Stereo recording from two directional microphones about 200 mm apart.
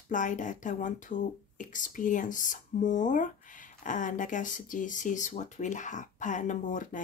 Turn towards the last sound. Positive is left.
turn(degrees=40)  # may be behind; listen again after turning